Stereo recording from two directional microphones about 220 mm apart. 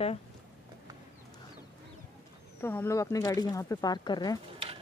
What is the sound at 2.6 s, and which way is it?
Speech, 10° left (ahead or behind).